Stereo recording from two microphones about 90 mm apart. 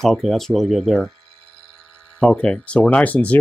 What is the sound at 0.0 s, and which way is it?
Speech, 5° left (ahead or behind).